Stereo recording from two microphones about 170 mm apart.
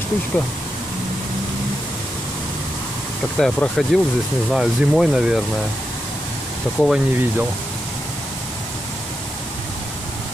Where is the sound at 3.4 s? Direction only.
5° left (ahead or behind).